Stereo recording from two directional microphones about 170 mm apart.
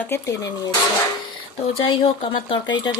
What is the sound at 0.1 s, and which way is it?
Speech, 15° left (ahead or behind).